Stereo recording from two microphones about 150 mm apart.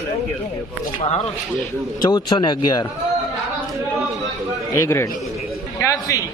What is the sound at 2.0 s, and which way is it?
Speech, 30° left (ahead or behind).